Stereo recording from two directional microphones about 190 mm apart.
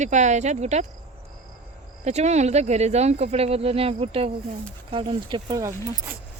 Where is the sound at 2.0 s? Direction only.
35° right (ahead or behind); by 6.1 s 15° right (ahead or behind).